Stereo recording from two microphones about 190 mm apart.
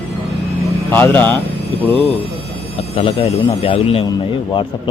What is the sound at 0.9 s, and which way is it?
Speech, 10° left (ahead or behind).